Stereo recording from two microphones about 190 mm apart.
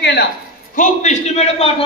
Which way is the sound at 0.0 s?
60° left (ahead or behind).